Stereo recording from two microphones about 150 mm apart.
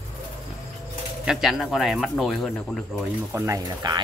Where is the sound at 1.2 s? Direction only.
5° right (ahead or behind).